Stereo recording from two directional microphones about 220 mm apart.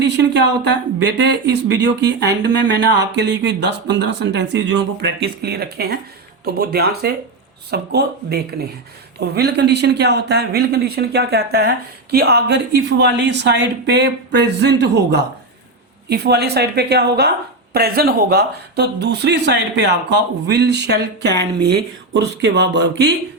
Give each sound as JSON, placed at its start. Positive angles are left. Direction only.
{"t": 0.7, "sound": "speech", "side_deg": -50}